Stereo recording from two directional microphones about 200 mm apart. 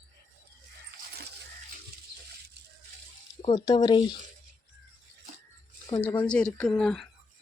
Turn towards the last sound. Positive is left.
turn(degrees=0)  # may be behind; listen again after turning